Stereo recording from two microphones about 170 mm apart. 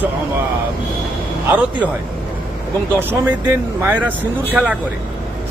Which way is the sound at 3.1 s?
15° right (ahead or behind).